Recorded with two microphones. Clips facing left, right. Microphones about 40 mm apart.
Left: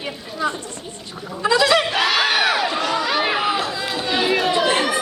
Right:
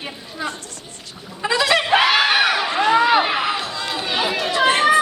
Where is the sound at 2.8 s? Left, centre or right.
Right.